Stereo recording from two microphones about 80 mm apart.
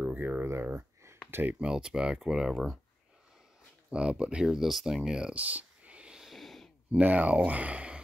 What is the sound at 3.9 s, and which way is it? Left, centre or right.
Speech, centre.